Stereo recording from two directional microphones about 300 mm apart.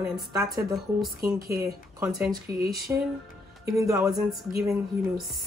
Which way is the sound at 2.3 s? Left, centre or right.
Right.